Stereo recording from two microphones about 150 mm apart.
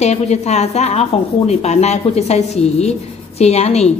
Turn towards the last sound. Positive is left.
turn(degrees=45)  # may be behind; listen again after turning